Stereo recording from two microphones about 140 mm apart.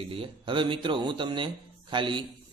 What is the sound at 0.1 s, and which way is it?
A man's voice, 35° right (ahead or behind).